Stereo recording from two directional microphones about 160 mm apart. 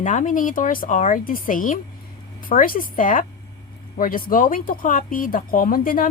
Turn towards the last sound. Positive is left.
turn(degrees=60)  # may be behind; listen again after turning